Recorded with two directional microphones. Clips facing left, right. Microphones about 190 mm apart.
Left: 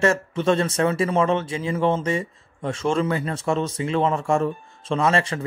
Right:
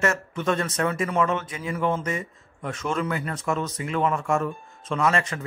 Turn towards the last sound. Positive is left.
turn(degrees=30)  # may be behind; listen again after turning